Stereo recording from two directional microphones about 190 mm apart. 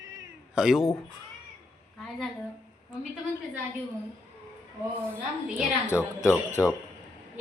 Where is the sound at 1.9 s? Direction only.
5° left (ahead or behind).